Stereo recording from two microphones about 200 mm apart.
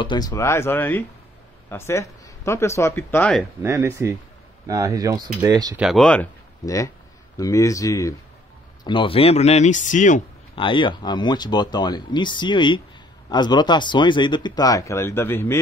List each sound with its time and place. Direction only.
0.0 s speech: 20° left (ahead or behind)
3.6 s speech: 15° right (ahead or behind)
5.8 s speech: centre (ahead or behind)
6.6 s speech: 15° left (ahead or behind); by 10.2 s 40° left (ahead or behind)
10.5 s speech: 25° left (ahead or behind)